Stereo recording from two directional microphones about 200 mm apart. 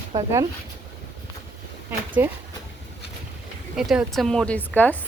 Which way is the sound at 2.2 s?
10° right (ahead or behind).